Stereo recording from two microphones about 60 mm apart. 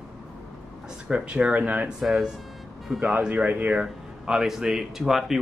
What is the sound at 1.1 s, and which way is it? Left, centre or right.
Speech, centre.